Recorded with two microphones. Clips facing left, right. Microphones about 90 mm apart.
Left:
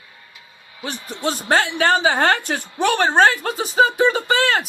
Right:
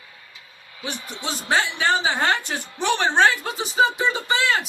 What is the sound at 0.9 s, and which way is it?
Speech, centre (ahead or behind).